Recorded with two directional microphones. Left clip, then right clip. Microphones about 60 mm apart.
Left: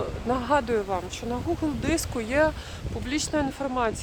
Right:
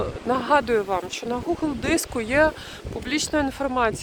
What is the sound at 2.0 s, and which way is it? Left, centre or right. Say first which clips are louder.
Speech: right 4 dB; right.